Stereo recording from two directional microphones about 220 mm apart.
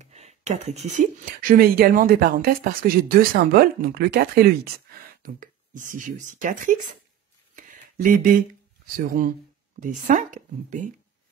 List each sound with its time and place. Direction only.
0.0 s speech: 30° right (ahead or behind)
7.5 s a sound: 35° right (ahead or behind)
8.8 s speech: 40° right (ahead or behind)